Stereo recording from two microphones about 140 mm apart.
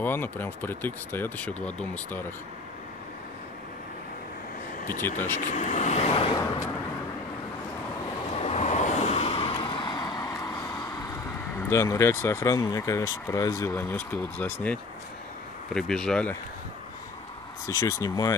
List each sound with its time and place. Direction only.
0.0 s speech: 15° left (ahead or behind)
5.0 s speech: 15° left (ahead or behind)
5.4 s speech: 65° left (ahead or behind); by 6.4 s 40° left (ahead or behind)
8.4 s vehicle: 50° left (ahead or behind); by 10.6 s 25° left (ahead or behind)
11.7 s speech: 20° left (ahead or behind)
17.6 s speech: 25° left (ahead or behind)